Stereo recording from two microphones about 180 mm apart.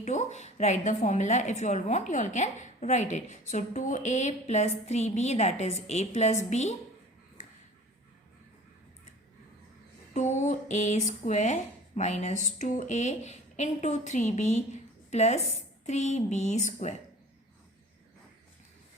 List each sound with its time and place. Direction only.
0.0 s a woman's voice: 40° left (ahead or behind)
10.2 s a woman's voice: 40° left (ahead or behind)